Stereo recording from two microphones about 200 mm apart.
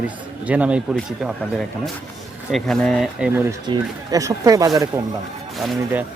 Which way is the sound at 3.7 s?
15° right (ahead or behind).